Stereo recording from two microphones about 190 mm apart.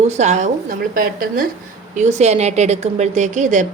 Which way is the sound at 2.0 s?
35° right (ahead or behind).